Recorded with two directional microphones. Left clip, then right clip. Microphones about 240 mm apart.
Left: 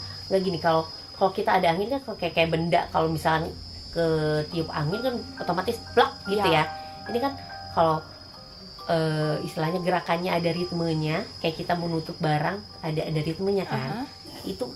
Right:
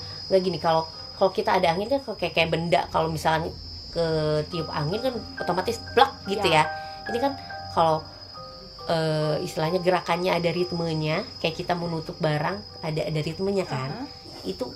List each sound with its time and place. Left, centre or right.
0.3 s speech: right
7.8 s speech: right